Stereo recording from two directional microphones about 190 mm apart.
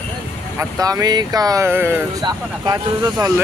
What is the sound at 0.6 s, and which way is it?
Speech, 20° right (ahead or behind).